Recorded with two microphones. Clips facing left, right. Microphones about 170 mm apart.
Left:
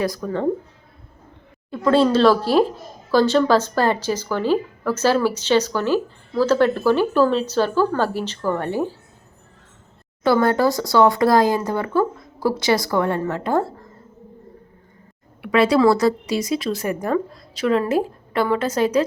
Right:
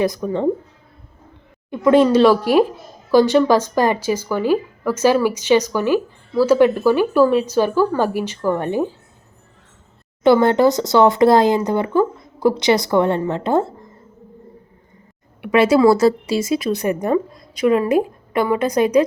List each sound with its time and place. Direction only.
0.0 s speech: 20° right (ahead or behind)
1.7 s speech: 15° right (ahead or behind)
10.2 s speech: 25° right (ahead or behind)
15.4 s a woman's voice: 20° right (ahead or behind)